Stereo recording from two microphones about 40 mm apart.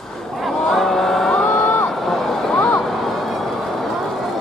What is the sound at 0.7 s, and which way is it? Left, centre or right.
Vehicle, centre.